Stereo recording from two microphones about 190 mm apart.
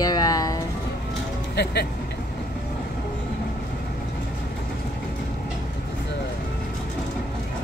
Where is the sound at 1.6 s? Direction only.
60° left (ahead or behind).